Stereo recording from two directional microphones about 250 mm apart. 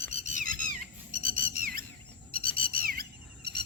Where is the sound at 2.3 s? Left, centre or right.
Right.